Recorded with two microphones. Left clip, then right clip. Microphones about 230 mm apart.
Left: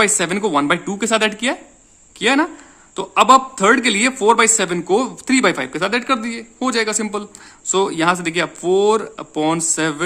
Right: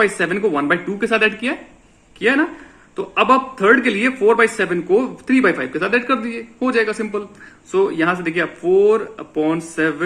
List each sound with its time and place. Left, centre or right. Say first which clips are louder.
0.0 s a man's voice: even; left